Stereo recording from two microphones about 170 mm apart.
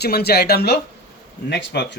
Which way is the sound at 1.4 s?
85° left.